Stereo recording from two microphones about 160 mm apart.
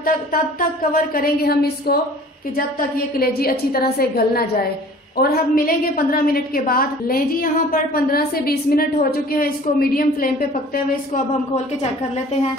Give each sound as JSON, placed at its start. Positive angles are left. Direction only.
{"t": 0.0, "sound": "a woman's voice", "side_deg": 65}
{"t": 3.2, "sound": "a woman's voice", "side_deg": 70}